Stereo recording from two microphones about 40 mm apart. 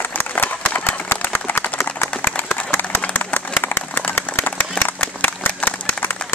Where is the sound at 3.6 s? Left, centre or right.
Left.